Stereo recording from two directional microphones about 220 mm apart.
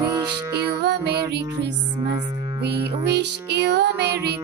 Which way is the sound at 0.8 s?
50° right (ahead or behind).